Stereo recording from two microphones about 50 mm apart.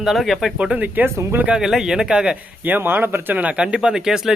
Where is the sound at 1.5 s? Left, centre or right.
Centre.